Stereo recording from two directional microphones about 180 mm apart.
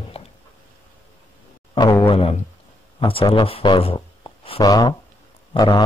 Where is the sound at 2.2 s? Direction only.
35° left (ahead or behind).